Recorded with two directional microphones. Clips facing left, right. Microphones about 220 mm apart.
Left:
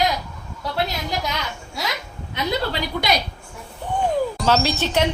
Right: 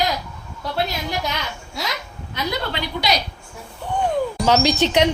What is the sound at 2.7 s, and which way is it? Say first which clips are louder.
Speech: even; 40° left (ahead or behind).